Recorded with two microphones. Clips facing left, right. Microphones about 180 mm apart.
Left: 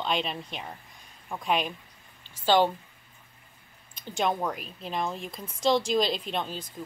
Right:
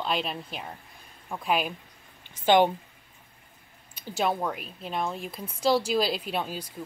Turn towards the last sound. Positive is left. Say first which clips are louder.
# right 1 dB
turn(degrees=-10)  # may be behind; listen again after turning